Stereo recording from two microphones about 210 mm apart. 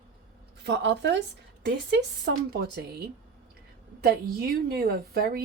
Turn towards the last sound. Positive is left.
turn(degrees=-45)  # may be behind; listen again after turning